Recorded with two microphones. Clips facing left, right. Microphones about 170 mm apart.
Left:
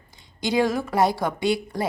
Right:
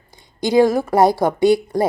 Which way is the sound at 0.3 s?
40° right (ahead or behind).